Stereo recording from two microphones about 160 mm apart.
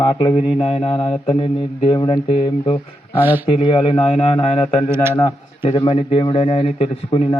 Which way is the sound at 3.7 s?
35° left (ahead or behind).